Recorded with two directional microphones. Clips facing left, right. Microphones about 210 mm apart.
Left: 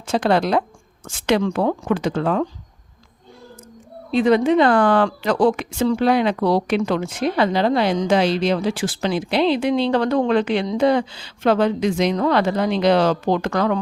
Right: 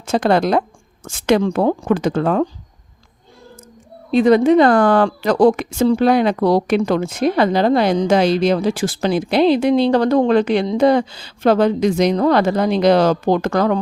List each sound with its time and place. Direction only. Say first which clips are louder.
0.0 s a woman's voice: right 3 dB; 45° right (ahead or behind)
4.1 s a woman's voice: right 4 dB; 40° right (ahead or behind)